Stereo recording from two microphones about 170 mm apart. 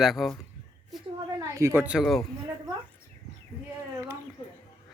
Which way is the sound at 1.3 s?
20° right (ahead or behind).